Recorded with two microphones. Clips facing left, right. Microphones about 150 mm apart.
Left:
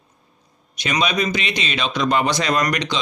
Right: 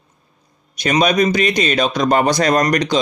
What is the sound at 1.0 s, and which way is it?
Speech, 45° right (ahead or behind).